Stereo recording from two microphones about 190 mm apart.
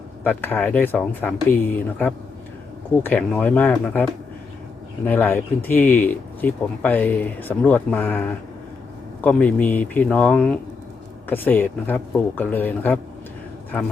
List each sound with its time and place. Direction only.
0.3 s speech: 10° left (ahead or behind)